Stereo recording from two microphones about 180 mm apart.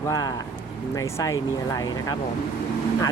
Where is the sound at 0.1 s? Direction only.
20° left (ahead or behind).